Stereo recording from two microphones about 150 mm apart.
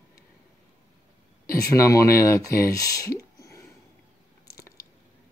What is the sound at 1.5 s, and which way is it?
Speech, 20° left (ahead or behind).